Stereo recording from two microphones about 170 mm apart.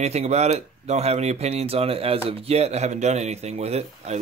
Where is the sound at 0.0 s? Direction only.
40° right (ahead or behind).